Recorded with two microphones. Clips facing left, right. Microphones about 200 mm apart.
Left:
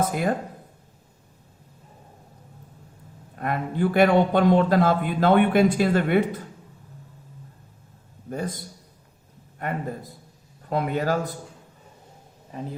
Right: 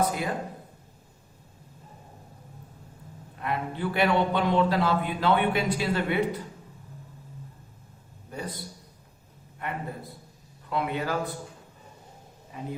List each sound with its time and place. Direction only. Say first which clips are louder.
0.0 s speech: left 4 dB; 50° left (ahead or behind)
3.3 s a man's voice: left 5 dB; 45° left (ahead or behind)
8.3 s a man's voice: left 6 dB; 50° left (ahead or behind)